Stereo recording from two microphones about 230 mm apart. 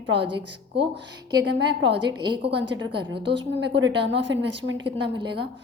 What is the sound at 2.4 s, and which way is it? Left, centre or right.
A woman's voice, right.